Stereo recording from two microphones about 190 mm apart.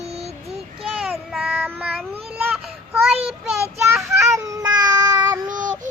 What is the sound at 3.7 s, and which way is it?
Child singing, 15° right (ahead or behind).